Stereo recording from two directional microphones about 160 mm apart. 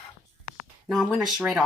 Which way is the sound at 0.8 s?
Centre (ahead or behind).